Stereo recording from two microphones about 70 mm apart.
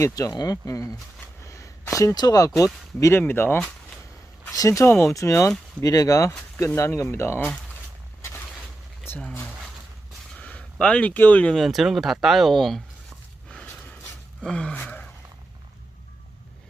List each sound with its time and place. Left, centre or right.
0.0 s speech: left
1.5 s a sound: left
1.9 s speech: left
2.1 s speech: left
3.0 s speech: left
4.5 s speech: left
4.9 s speech: left
5.8 s speech: left
10.3 s a sound: centre
11.1 s speech: left
11.5 s speech: centre
14.4 s gasp: centre